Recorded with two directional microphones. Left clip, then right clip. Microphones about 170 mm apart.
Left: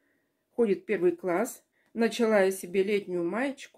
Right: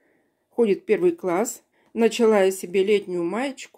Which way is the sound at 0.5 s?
35° right (ahead or behind).